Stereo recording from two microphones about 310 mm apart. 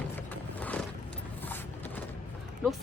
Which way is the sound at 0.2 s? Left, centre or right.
Centre.